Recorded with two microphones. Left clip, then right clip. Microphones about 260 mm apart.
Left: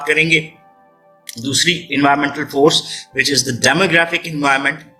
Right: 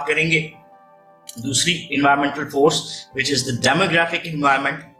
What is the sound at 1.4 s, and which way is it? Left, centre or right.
A man's voice, left.